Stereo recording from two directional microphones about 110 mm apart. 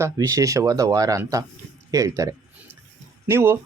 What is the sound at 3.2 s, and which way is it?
Speech, 20° right (ahead or behind).